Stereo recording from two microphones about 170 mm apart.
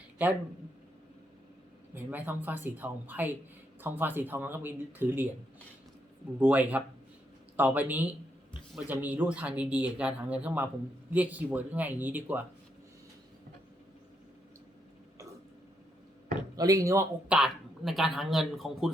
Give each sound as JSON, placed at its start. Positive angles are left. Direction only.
{"t": 2.0, "sound": "speech", "side_deg": -10}
{"t": 6.4, "sound": "speech", "side_deg": -10}
{"t": 16.6, "sound": "speech", "side_deg": -20}
{"t": 17.2, "sound": "a woman's voice", "side_deg": -5}